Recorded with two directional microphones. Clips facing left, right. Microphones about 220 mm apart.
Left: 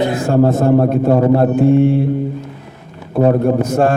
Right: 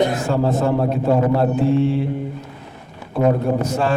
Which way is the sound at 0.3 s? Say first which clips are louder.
Left 6 dB; 50° left (ahead or behind).